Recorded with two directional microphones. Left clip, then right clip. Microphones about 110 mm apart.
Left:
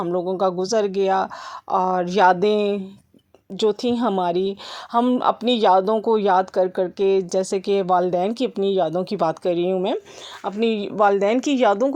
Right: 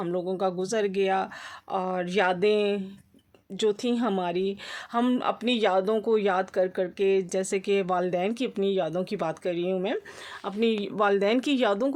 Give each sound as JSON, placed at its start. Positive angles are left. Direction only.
{"t": 0.2, "sound": "speech", "side_deg": 35}
{"t": 4.9, "sound": "speech", "side_deg": 25}
{"t": 5.2, "sound": "speech", "side_deg": 40}
{"t": 10.4, "sound": "speech", "side_deg": 25}